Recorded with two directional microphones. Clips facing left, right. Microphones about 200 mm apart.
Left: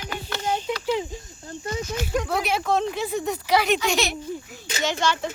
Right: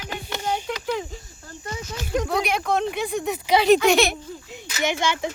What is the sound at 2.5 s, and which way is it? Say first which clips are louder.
Speech: even; centre (ahead or behind).